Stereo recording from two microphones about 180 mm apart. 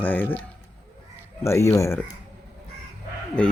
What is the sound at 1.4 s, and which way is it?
Speech, 15° left (ahead or behind).